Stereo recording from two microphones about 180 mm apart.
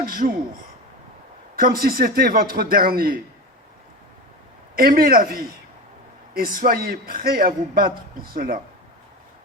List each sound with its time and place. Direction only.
0.0 s speech: 55° right (ahead or behind)
1.5 s a man's voice: 55° right (ahead or behind)
4.7 s a man's voice: 55° right (ahead or behind)